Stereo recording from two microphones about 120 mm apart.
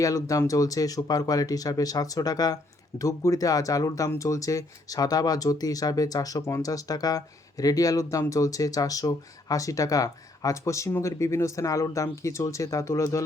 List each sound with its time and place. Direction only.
0.0 s speech: 30° left (ahead or behind)